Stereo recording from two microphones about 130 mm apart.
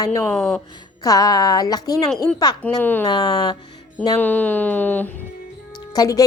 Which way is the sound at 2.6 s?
15° left (ahead or behind).